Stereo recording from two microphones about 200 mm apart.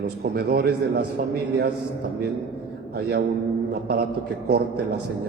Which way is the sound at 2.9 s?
50° right (ahead or behind).